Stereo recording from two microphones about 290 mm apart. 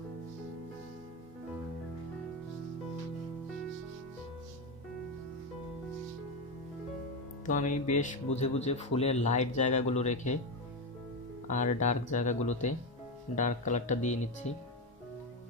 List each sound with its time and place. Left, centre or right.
7.4 s speech: left
11.4 s speech: left